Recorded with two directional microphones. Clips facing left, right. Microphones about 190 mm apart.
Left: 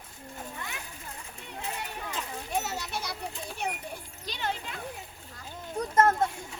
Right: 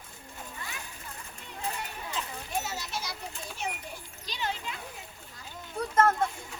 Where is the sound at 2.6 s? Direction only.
60° left (ahead or behind).